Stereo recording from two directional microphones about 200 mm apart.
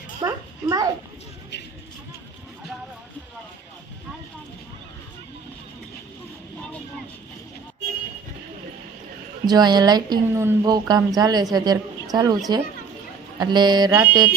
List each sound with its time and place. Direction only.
0.2 s a sound: 20° right (ahead or behind)
9.5 s a woman's voice: 20° right (ahead or behind)
13.4 s speech: 20° right (ahead or behind)